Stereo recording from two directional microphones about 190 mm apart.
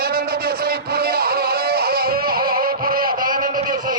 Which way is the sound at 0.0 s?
55° right (ahead or behind).